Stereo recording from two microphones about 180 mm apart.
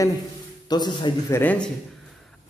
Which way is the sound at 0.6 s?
25° left (ahead or behind).